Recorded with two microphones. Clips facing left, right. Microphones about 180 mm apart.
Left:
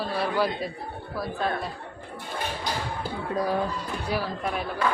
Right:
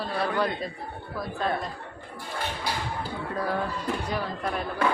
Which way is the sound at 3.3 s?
15° left (ahead or behind).